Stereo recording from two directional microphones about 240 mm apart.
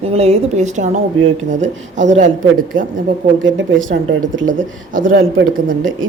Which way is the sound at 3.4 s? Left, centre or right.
Right.